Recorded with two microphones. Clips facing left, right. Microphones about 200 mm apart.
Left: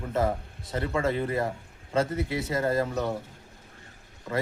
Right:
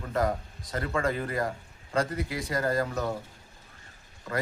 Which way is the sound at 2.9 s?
5° left (ahead or behind).